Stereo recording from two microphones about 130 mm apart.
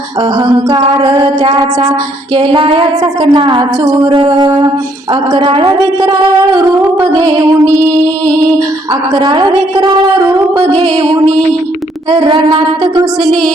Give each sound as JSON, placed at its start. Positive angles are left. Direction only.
{"t": 0.2, "sound": "a woman's voice", "side_deg": -30}
{"t": 2.3, "sound": "child singing", "side_deg": -40}
{"t": 3.2, "sound": "a woman's voice", "side_deg": -40}
{"t": 8.3, "sound": "a sound", "side_deg": -30}
{"t": 9.1, "sound": "a woman's voice", "side_deg": -35}